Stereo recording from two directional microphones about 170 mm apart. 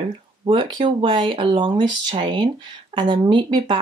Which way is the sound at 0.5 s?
30° right (ahead or behind).